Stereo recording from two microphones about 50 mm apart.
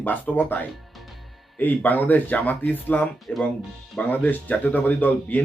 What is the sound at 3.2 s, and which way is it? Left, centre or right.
Speech, centre.